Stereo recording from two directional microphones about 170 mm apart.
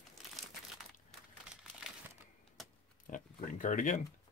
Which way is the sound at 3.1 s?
50° left (ahead or behind).